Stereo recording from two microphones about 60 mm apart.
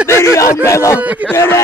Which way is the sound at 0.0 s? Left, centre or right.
Left.